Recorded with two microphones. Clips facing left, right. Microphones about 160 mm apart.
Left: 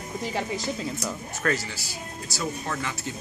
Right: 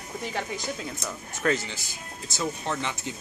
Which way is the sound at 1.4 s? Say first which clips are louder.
Right 1 dB; 20° right (ahead or behind).